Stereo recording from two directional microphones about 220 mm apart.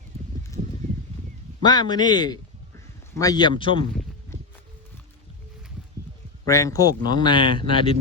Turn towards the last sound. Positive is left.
turn(degrees=25)  # may be behind; listen again after turning